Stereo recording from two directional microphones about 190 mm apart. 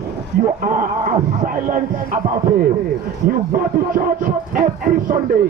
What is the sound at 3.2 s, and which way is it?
Music, 45° right (ahead or behind).